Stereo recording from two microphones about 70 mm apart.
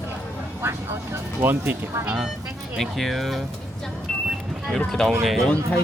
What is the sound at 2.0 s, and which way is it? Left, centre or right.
Speech, centre.